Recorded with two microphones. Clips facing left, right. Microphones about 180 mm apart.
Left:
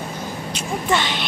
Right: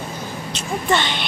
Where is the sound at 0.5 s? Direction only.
5° left (ahead or behind).